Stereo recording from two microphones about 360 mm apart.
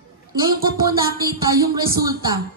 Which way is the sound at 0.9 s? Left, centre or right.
Centre.